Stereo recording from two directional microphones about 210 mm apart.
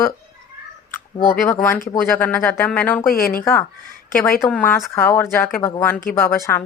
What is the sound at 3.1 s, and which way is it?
Speech, 45° left (ahead or behind).